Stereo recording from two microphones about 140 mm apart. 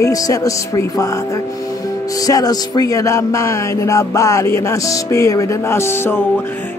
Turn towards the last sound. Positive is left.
turn(degrees=20)  # may be behind; listen again after turning